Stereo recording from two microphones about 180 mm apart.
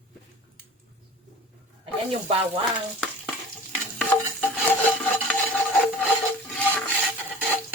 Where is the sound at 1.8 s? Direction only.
30° right (ahead or behind).